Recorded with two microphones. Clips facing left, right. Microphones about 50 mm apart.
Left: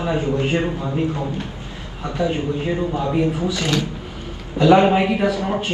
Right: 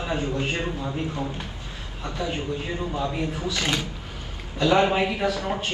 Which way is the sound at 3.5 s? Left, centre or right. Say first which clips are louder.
Left 5 dB; right.